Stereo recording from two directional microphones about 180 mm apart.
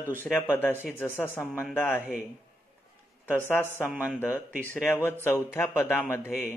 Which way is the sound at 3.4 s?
15° left (ahead or behind).